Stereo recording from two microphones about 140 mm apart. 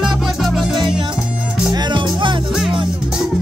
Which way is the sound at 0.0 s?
Centre (ahead or behind).